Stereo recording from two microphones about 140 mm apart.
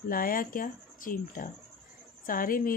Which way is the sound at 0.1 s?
90° left.